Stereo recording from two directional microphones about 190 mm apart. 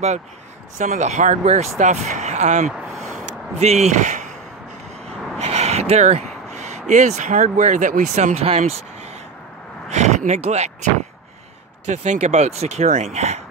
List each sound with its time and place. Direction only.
0.7 s speech: 40° right (ahead or behind)
5.4 s speech: 35° right (ahead or behind)
9.8 s speech: 40° right (ahead or behind)
11.9 s speech: 35° right (ahead or behind)